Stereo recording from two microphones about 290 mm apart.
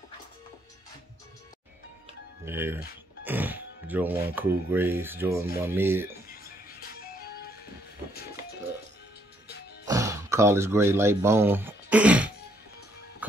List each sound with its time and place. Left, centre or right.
2.4 s speech: centre
6.2 s music: left
9.8 s speech: centre
13.2 s music: centre